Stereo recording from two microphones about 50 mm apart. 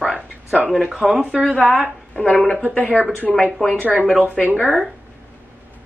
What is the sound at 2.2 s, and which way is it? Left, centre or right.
Speech, left.